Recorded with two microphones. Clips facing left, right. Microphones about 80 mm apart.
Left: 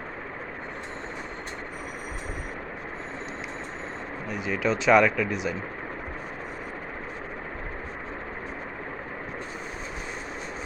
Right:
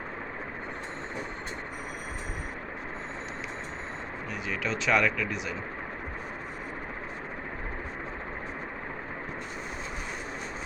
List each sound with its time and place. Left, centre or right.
4.4 s speech: centre